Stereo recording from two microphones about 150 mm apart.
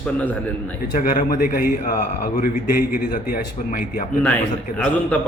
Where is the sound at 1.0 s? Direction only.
70° left (ahead or behind).